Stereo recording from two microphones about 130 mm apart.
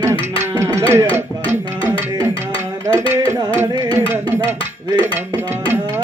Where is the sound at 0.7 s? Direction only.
25° right (ahead or behind).